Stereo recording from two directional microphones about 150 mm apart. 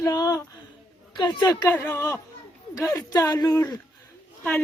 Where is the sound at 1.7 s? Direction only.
10° left (ahead or behind).